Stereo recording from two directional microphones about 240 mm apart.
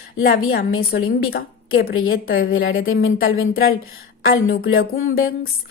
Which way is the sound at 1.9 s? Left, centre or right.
Left.